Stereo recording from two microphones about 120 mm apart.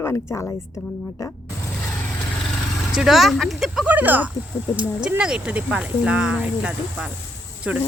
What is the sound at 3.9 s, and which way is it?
Speech, 15° right (ahead or behind).